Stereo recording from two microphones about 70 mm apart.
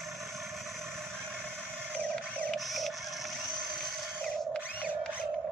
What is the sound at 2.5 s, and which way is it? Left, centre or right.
Printer, centre.